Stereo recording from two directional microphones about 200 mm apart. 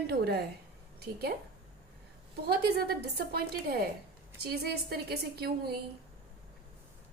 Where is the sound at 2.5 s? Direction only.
50° right (ahead or behind).